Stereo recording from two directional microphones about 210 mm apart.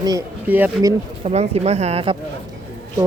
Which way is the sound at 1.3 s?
30° right (ahead or behind).